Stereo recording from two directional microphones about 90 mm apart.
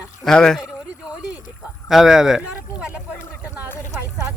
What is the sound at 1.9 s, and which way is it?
Speech, 5° right (ahead or behind).